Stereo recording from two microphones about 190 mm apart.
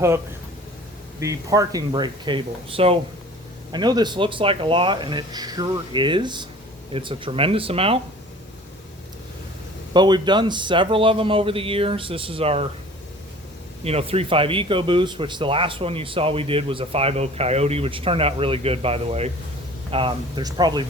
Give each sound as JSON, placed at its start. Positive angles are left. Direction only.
{"t": 1.2, "sound": "speech", "side_deg": -15}
{"t": 9.9, "sound": "speech", "side_deg": -25}
{"t": 13.8, "sound": "speech", "side_deg": -30}